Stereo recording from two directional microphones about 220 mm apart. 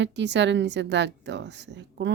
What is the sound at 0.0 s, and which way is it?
A woman's voice, 50° right (ahead or behind).